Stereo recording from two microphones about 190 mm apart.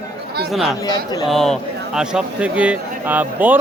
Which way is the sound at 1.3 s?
Centre (ahead or behind).